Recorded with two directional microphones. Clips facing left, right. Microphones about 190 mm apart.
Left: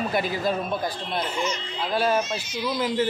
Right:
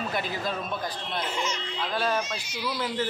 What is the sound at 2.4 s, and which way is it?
Speech, 10° right (ahead or behind).